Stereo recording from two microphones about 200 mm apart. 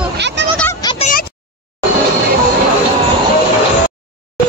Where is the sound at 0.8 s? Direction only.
30° left (ahead or behind).